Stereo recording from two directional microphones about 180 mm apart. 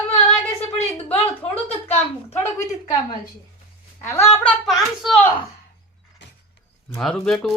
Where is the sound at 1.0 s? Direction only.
35° left (ahead or behind).